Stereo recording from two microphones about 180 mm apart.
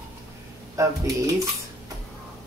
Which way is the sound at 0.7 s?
15° right (ahead or behind).